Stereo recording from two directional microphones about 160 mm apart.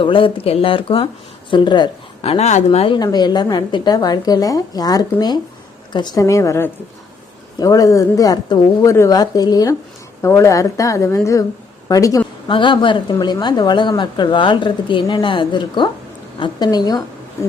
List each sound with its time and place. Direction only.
0.0 s a woman's voice: 35° left (ahead or behind)
12.5 s a woman's voice: 30° left (ahead or behind)